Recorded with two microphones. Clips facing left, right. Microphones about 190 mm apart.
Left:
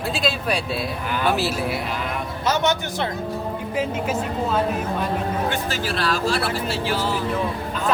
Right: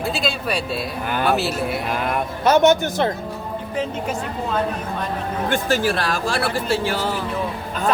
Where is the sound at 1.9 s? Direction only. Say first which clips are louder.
Right 4 dB; 55° right (ahead or behind).